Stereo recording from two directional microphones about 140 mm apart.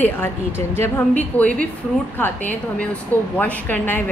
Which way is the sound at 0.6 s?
15° left (ahead or behind).